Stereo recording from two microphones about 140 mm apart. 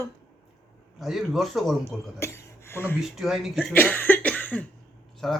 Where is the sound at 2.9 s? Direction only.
Centre (ahead or behind).